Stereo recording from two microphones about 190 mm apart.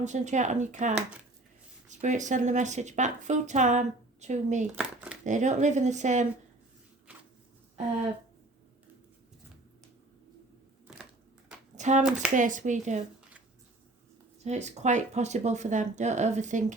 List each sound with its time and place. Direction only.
0.0 s speech: 40° right (ahead or behind)
4.7 s speech: 5° right (ahead or behind)
5.2 s speech: 40° right (ahead or behind)
10.9 s crushing: 5° right (ahead or behind)
11.8 s speech: 40° right (ahead or behind)
14.4 s speech: 35° right (ahead or behind)